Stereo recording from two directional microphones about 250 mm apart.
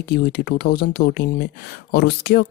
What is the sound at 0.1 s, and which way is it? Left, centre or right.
Speech, left.